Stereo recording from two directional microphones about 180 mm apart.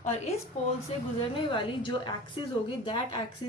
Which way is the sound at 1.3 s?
25° left (ahead or behind).